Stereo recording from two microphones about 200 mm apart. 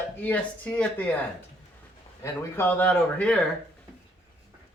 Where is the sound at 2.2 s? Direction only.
10° left (ahead or behind).